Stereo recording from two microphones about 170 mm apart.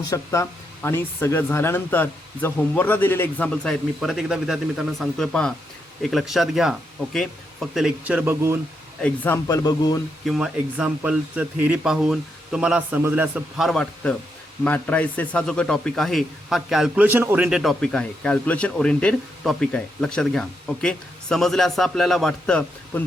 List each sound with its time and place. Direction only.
0.1 s a man's voice: 15° left (ahead or behind); by 8.5 s 15° right (ahead or behind)
9.0 s speech: 10° left (ahead or behind)
9.5 s speech: 20° left (ahead or behind)
10.2 s a man's voice: centre (ahead or behind)